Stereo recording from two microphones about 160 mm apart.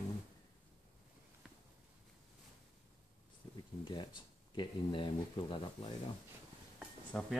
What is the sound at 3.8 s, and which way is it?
Speech, 30° left (ahead or behind).